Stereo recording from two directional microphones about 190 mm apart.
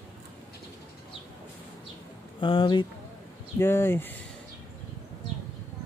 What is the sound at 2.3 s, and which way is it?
Speech, 25° left (ahead or behind).